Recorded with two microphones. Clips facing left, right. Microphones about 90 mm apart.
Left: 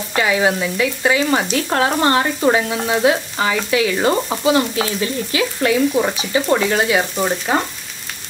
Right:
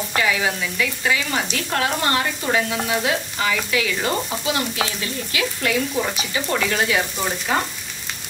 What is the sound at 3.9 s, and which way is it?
Stir, 30° left (ahead or behind).